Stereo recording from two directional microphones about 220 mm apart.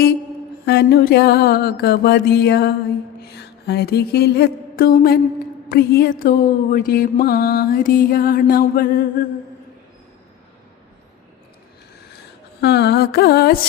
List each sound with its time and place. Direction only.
0.6 s mantra: 45° left (ahead or behind)
3.2 s music: 50° left (ahead or behind)
5.6 s mantra: 45° left (ahead or behind)
12.6 s mantra: 50° left (ahead or behind)